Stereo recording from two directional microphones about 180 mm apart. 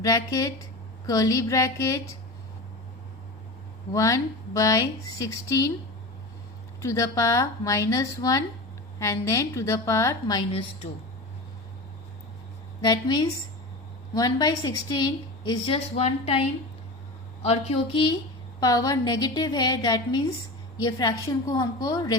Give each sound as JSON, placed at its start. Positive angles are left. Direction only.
{"t": 0.0, "sound": "speech", "side_deg": 20}
{"t": 3.9, "sound": "speech", "side_deg": 15}
{"t": 6.8, "sound": "speech", "side_deg": 15}
{"t": 12.8, "sound": "a woman's voice", "side_deg": 20}
{"t": 17.4, "sound": "a woman's voice", "side_deg": 35}